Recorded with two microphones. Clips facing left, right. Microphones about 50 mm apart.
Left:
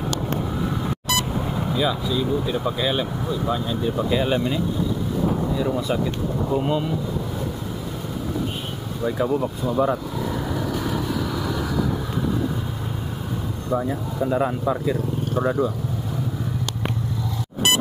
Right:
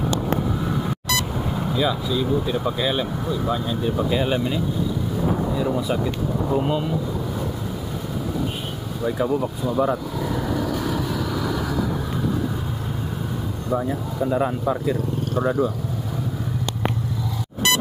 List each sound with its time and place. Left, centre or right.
1.8 s speech: centre
9.0 s speech: centre
10.5 s vehicle: centre
13.7 s speech: centre